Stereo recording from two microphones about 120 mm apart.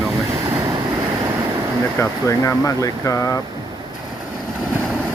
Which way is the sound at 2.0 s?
25° left (ahead or behind).